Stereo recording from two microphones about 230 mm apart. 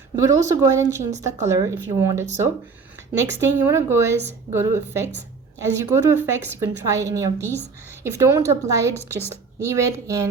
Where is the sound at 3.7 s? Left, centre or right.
Centre.